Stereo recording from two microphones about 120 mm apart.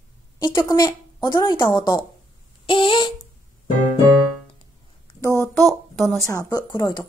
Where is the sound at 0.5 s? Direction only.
35° left (ahead or behind).